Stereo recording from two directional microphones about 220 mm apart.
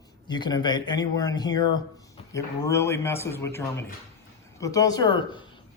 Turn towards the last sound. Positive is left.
turn(degrees=20)  # may be behind; listen again after turning